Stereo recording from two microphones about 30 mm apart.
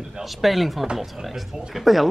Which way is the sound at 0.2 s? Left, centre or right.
Centre.